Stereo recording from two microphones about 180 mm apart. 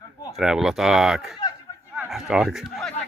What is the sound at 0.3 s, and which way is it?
Speech, centre (ahead or behind).